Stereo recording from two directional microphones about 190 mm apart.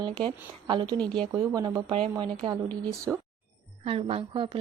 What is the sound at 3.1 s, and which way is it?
Speech, 10° right (ahead or behind).